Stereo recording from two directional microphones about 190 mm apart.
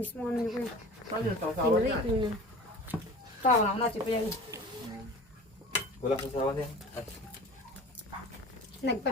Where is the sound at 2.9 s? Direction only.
10° left (ahead or behind).